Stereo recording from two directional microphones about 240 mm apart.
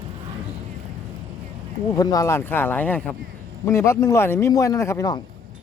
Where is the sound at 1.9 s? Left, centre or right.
Centre.